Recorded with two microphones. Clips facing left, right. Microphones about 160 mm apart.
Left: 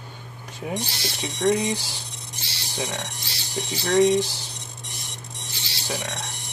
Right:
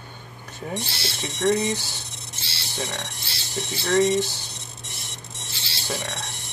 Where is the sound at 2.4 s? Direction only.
15° left (ahead or behind).